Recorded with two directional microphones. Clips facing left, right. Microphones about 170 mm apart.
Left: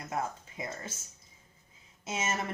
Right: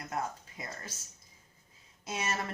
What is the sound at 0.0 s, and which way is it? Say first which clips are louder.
Speech: left 1 dB; 20° left (ahead or behind).